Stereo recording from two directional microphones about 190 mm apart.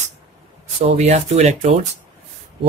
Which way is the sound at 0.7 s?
35° right (ahead or behind).